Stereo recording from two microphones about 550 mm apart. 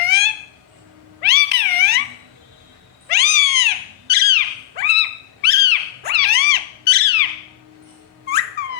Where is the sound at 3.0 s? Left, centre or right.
Centre.